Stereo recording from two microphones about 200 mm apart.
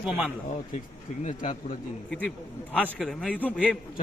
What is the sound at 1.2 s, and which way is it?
Speech, 40° left (ahead or behind).